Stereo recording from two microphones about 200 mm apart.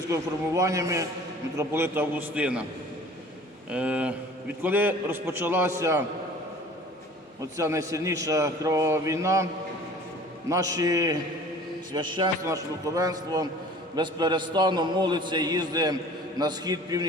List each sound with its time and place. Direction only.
0.1 s a man's voice: 15° right (ahead or behind)
3.7 s a man's voice: 5° right (ahead or behind)
7.5 s a man's voice: 15° right (ahead or behind)
10.5 s a man's voice: 20° right (ahead or behind)